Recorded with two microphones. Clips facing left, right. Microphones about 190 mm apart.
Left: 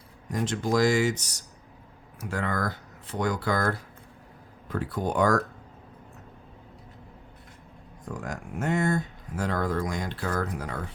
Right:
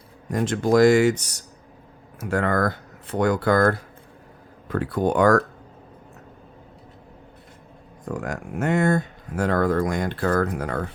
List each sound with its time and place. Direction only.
0.3 s speech: 55° right (ahead or behind)
4.7 s speech: 70° right (ahead or behind)
8.0 s speech: 70° right (ahead or behind)